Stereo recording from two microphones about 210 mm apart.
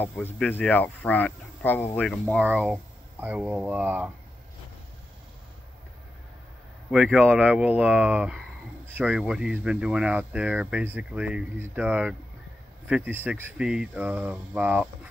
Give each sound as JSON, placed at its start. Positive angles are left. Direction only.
{"t": 0.0, "sound": "speech", "side_deg": 10}
{"t": 6.9, "sound": "speech", "side_deg": -5}